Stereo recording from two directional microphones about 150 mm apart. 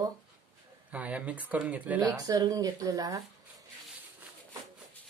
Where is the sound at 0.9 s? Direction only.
10° right (ahead or behind).